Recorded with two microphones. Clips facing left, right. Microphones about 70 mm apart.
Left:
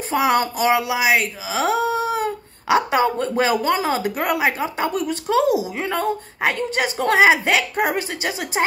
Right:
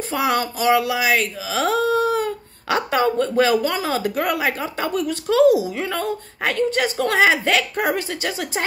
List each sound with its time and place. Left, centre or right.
0.1 s speech: left